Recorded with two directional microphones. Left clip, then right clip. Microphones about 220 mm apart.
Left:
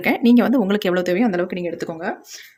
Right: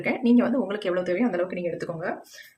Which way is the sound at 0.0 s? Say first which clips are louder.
Left 6 dB; 45° left (ahead or behind).